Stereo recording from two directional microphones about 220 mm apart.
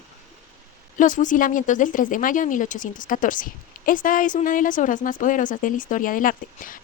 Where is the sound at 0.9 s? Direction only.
35° left (ahead or behind).